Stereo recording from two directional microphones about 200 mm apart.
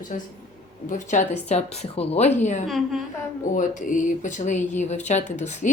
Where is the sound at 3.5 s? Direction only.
40° left (ahead or behind).